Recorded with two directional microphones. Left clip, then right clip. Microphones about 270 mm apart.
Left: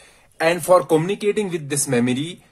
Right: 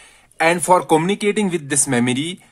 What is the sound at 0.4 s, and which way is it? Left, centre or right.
Speech, right.